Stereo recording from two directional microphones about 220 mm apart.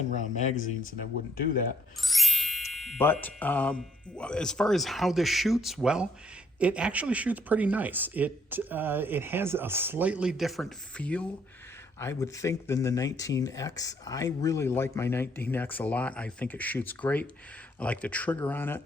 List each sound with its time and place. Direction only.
0.3 s speech: 35° left (ahead or behind)
2.0 s speech: centre (ahead or behind)